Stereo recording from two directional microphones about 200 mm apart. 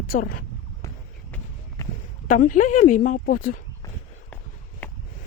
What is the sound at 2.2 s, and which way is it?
Speech, 40° left (ahead or behind).